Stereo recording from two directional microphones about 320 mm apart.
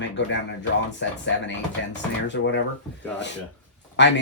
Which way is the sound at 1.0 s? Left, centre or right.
Left.